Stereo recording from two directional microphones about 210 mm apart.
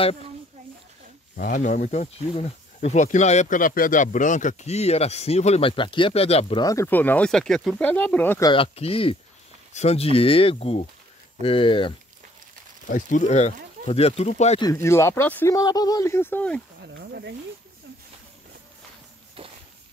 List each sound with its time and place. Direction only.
1.3 s speech: 40° left (ahead or behind); by 8.5 s 10° left (ahead or behind)
8.5 s speech: 25° left (ahead or behind)
12.8 s speech: 35° left (ahead or behind)
14.6 s speech: 15° left (ahead or behind)
16.8 s snake: 55° right (ahead or behind)